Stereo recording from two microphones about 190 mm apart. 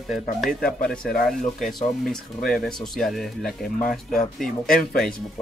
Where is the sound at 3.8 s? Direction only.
45° left (ahead or behind).